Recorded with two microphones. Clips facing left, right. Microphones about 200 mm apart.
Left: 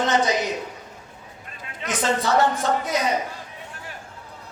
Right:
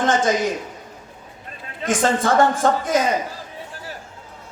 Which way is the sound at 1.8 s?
50° right (ahead or behind).